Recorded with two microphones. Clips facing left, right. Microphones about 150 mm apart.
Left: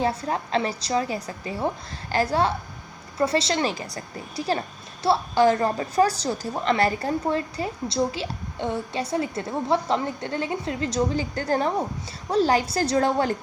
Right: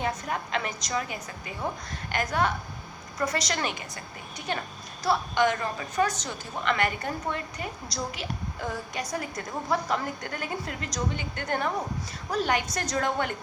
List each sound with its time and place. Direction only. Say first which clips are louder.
0.0 s a woman's voice: left 5 dB; 30° left (ahead or behind)